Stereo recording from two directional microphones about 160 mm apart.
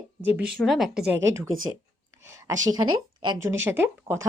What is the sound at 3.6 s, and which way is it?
Speech, 15° right (ahead or behind).